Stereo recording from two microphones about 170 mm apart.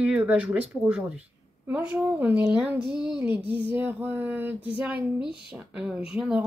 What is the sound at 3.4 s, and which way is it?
Speech, 30° left (ahead or behind).